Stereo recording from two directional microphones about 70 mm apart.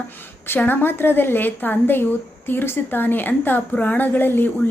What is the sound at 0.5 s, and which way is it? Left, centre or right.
A woman's voice, left.